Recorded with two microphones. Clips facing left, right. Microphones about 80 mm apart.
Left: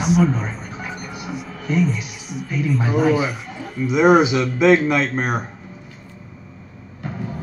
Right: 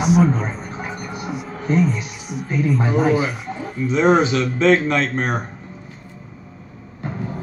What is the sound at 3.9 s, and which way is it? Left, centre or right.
Speech, centre.